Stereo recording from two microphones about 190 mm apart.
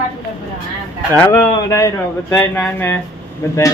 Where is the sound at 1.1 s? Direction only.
10° left (ahead or behind).